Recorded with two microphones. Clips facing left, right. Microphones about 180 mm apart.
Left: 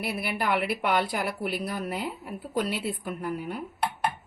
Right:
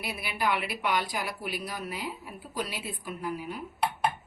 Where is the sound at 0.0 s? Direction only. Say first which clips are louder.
Left 2 dB; 55° left (ahead or behind).